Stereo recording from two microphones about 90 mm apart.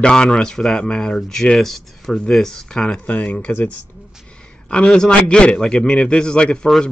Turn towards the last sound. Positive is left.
turn(degrees=5)  # may be behind; listen again after turning